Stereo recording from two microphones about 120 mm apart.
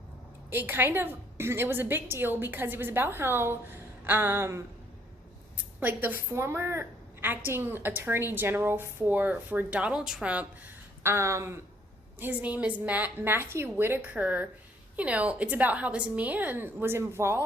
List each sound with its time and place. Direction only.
0.5 s a woman's voice: 20° right (ahead or behind)
5.8 s a woman's voice: 15° right (ahead or behind)
11.0 s a woman's voice: 20° right (ahead or behind)
12.2 s a woman's voice: 10° right (ahead or behind)